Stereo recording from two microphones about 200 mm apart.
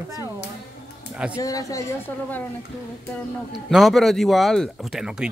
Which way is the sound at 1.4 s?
15° left (ahead or behind).